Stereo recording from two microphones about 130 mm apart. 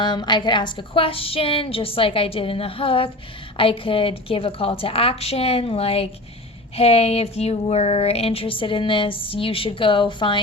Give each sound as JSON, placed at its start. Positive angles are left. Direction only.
{"t": 0.0, "sound": "speech", "side_deg": 35}